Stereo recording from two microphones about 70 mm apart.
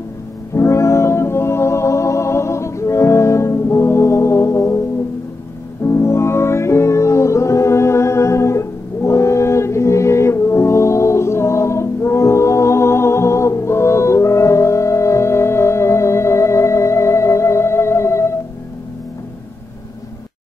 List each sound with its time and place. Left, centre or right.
0.6 s music: left